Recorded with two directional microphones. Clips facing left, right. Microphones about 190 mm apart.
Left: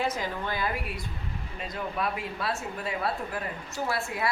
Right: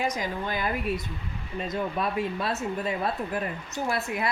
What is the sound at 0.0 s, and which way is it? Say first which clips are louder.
Speech: right 1 dB; 15° right (ahead or behind).